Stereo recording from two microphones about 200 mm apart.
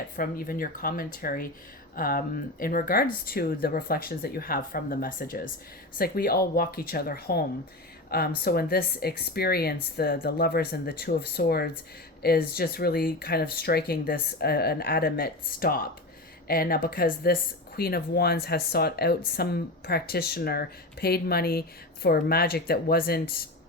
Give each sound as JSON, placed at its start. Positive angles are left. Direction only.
{"t": 0.2, "sound": "speech", "side_deg": 45}